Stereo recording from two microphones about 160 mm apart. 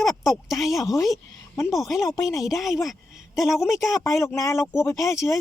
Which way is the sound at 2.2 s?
20° left (ahead or behind).